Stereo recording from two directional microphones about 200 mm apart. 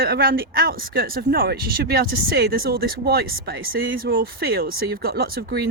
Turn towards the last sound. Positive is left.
turn(degrees=-50)  # may be behind; listen again after turning